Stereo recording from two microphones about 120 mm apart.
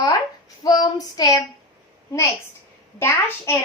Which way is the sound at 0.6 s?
35° left (ahead or behind).